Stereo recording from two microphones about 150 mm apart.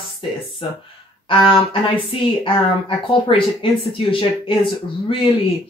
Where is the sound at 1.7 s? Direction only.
35° left (ahead or behind).